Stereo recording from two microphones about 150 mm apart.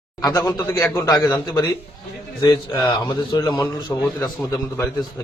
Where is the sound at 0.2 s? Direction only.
25° left (ahead or behind).